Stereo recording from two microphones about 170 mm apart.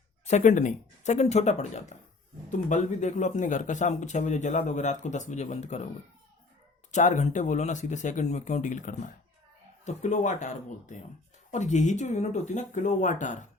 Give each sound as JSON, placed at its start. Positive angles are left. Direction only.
{"t": 0.3, "sound": "speech", "side_deg": 45}
{"t": 6.9, "sound": "speech", "side_deg": 45}